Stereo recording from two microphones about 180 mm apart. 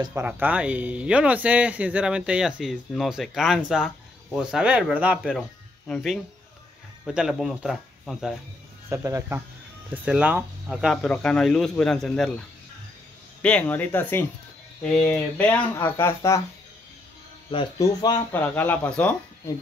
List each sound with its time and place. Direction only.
0.1 s speech: 10° right (ahead or behind)
8.8 s speech: 15° right (ahead or behind); by 12.4 s 5° left (ahead or behind)
13.4 s speech: 5° left (ahead or behind)
17.5 s speech: 25° left (ahead or behind)
18.3 s speech: 10° left (ahead or behind)